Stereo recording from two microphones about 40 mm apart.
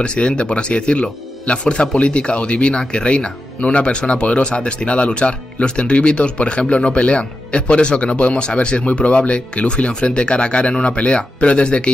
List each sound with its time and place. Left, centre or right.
0.0 s speech: left